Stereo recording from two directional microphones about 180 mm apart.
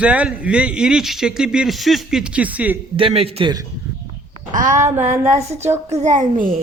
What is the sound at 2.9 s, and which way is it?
Speech, 30° right (ahead or behind).